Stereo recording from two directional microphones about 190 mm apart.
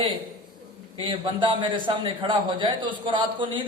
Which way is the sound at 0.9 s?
25° right (ahead or behind).